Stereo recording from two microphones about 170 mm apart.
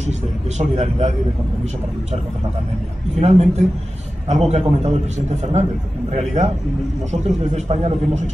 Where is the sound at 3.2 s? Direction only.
35° right (ahead or behind).